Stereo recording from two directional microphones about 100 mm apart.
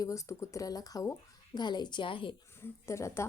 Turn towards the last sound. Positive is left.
turn(degrees=30)  # may be behind; listen again after turning